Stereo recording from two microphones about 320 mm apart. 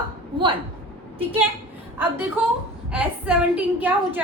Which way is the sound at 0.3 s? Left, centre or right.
Centre.